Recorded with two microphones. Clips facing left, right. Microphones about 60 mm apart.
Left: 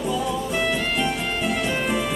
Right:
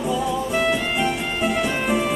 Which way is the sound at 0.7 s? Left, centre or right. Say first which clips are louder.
Right 2 dB; centre.